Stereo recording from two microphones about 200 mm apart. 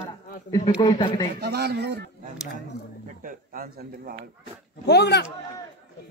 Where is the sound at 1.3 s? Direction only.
55° right (ahead or behind).